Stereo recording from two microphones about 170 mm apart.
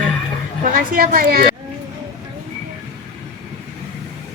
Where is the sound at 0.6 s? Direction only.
50° right (ahead or behind).